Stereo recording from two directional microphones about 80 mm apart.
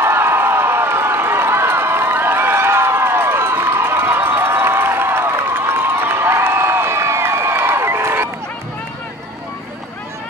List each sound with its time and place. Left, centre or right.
0.0 s run: right